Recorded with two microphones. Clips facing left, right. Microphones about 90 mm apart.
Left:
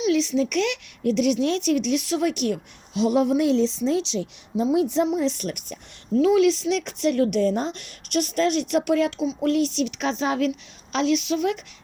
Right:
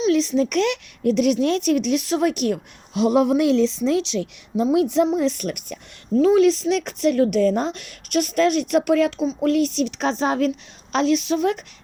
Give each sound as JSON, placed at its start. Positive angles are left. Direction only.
{"t": 0.0, "sound": "a woman's voice", "side_deg": -40}
{"t": 5.1, "sound": "a woman's voice", "side_deg": -50}
{"t": 6.1, "sound": "a woman's voice", "side_deg": -40}